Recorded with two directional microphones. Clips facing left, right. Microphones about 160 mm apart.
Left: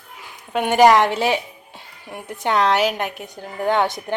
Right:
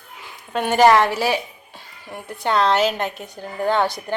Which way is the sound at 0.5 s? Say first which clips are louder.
Left 1 dB; 15° left (ahead or behind).